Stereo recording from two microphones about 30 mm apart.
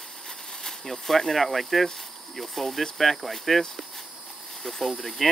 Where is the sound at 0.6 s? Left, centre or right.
Centre.